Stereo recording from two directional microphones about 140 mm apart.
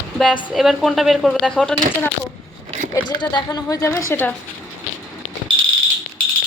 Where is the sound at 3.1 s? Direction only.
30° left (ahead or behind).